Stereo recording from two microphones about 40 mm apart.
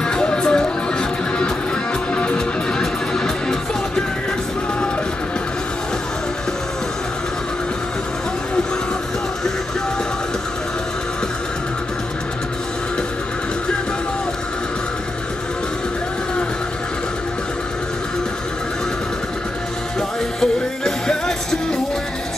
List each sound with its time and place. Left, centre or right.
0.1 s music: left
20.3 s music: centre